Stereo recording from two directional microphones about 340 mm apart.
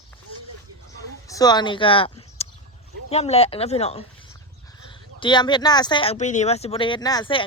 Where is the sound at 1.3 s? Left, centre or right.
Centre.